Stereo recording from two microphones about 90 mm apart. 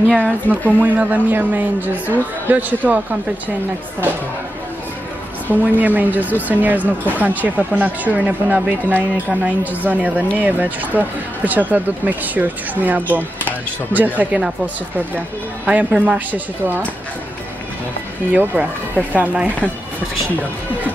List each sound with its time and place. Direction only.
0.5 s speech: 20° right (ahead or behind)
5.5 s speech: 20° right (ahead or behind)
15.6 s speech: 15° right (ahead or behind)
18.3 s speech: 15° right (ahead or behind)